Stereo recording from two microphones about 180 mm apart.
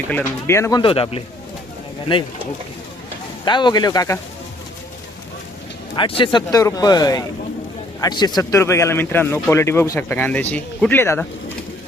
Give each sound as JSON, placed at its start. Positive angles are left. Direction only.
{"t": 0.1, "sound": "speech", "side_deg": 10}
{"t": 0.8, "sound": "speech", "side_deg": 30}
{"t": 3.4, "sound": "speech", "side_deg": 25}
{"t": 6.0, "sound": "speech", "side_deg": 30}